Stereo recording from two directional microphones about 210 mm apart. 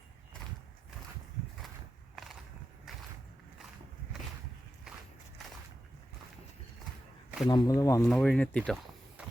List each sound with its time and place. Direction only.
7.4 s speech: 20° left (ahead or behind)
8.0 s speech: centre (ahead or behind)